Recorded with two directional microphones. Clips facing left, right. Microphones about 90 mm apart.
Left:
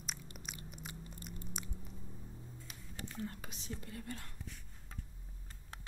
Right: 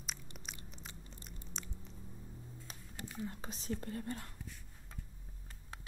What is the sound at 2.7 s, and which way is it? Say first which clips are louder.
Music: right 1 dB; 35° right (ahead or behind).